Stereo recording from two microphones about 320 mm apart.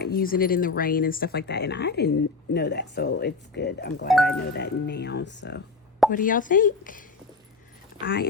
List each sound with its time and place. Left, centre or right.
0.0 s a woman's voice: left
8.0 s speech: left